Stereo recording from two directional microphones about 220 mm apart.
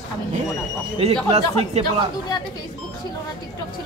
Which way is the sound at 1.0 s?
30° right (ahead or behind).